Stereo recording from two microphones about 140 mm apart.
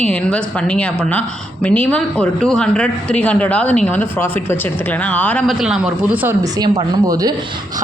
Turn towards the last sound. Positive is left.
turn(degrees=-25)  # may be behind; listen again after turning